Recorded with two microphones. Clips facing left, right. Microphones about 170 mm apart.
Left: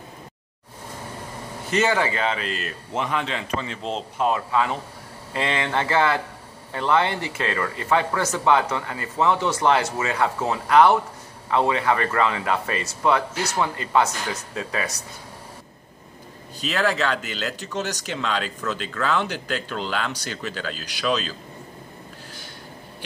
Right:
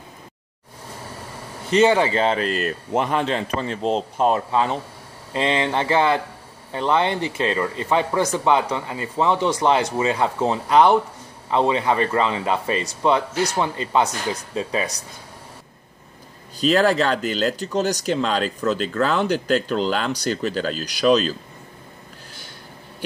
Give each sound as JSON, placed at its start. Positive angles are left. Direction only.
{"t": 1.7, "sound": "speech", "side_deg": -20}
{"t": 16.5, "sound": "speech", "side_deg": -40}